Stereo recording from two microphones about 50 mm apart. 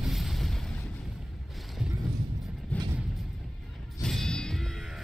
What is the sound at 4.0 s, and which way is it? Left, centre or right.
Music, centre.